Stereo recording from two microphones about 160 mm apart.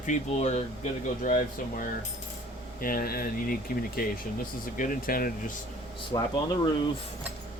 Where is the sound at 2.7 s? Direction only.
65° left (ahead or behind).